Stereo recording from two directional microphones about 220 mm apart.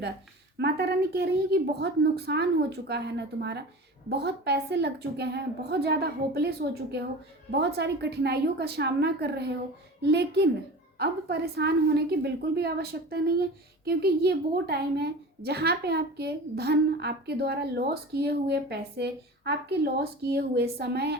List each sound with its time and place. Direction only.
0.6 s a woman's voice: 45° right (ahead or behind)